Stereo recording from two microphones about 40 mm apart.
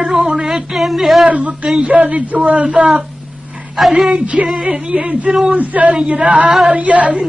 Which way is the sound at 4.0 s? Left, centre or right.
Centre.